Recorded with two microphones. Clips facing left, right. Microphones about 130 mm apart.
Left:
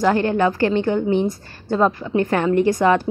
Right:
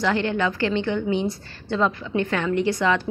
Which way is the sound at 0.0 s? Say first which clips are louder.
Left 5 dB; 45° left (ahead or behind).